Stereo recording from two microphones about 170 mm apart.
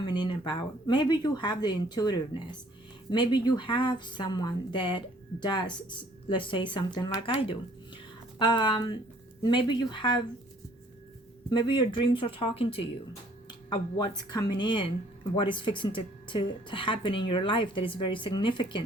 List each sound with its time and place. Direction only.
0.0 s speech: 25° left (ahead or behind)
11.4 s speech: 30° left (ahead or behind)